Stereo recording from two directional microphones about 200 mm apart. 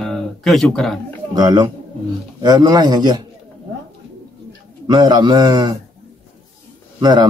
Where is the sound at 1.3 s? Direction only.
20° right (ahead or behind).